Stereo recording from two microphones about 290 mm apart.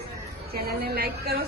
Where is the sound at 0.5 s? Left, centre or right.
Right.